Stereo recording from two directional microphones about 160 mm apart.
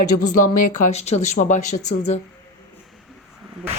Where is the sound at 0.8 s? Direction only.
45° left (ahead or behind).